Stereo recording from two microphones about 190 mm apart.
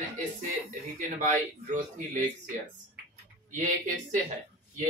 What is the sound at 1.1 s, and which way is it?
Speech, 40° right (ahead or behind).